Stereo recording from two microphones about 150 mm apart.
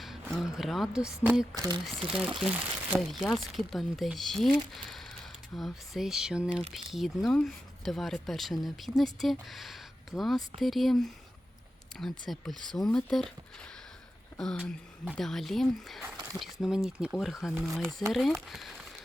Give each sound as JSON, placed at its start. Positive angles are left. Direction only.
{"t": 0.0, "sound": "a woman's voice", "side_deg": 0}
{"t": 1.5, "sound": "speech", "side_deg": -25}
{"t": 2.0, "sound": "speech", "side_deg": -5}
{"t": 14.3, "sound": "speech", "side_deg": 5}